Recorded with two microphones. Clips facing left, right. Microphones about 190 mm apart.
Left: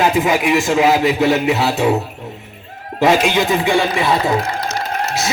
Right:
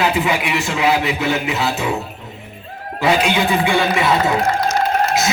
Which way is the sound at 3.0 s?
45° left (ahead or behind).